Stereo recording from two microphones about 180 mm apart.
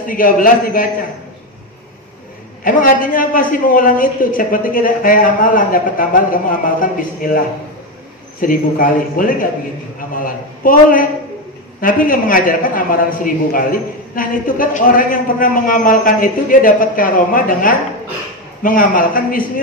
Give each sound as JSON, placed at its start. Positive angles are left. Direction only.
{"t": 0.0, "sound": "a man's voice", "side_deg": 50}
{"t": 2.6, "sound": "a man's voice", "side_deg": 50}
{"t": 8.4, "sound": "a man's voice", "side_deg": 50}